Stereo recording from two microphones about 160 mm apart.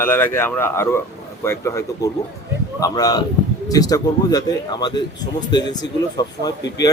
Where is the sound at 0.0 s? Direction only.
15° left (ahead or behind).